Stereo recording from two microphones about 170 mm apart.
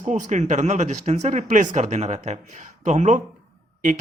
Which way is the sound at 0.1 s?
45° right (ahead or behind).